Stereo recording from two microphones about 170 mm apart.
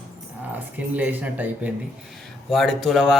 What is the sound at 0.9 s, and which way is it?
Speech, 10° right (ahead or behind).